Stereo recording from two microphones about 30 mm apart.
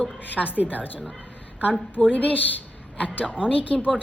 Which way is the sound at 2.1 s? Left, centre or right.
Left.